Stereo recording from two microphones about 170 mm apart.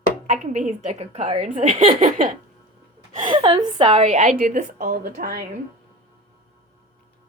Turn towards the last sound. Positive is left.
turn(degrees=-60)  # may be behind; listen again after turning